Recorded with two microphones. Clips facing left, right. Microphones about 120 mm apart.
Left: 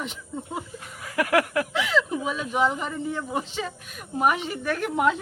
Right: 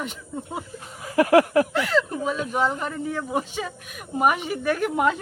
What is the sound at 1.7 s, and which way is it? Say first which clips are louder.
Speech: right 2 dB; centre (ahead or behind).